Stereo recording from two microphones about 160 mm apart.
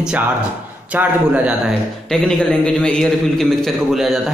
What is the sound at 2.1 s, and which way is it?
A man's voice, 5° left (ahead or behind).